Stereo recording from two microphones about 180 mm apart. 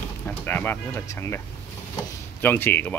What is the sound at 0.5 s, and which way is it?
Speech, 10° left (ahead or behind).